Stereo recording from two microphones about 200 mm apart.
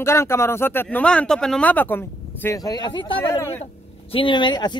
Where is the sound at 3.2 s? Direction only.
10° left (ahead or behind).